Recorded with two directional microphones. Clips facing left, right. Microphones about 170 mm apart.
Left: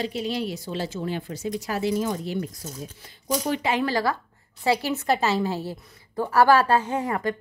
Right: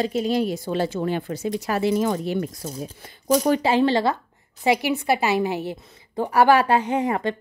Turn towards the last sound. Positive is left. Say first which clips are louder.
# right 3 dB
turn(degrees=-20)  # may be behind; listen again after turning